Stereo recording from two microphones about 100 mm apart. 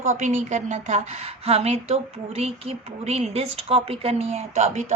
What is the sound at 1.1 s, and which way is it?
Speech, 90° right.